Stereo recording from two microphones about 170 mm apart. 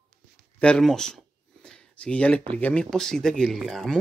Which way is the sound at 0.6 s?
5° left (ahead or behind).